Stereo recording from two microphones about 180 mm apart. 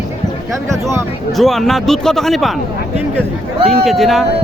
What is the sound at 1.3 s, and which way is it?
Speech, centre (ahead or behind).